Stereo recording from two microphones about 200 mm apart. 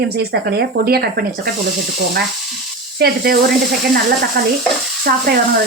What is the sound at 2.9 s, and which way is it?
Speech, 50° right (ahead or behind).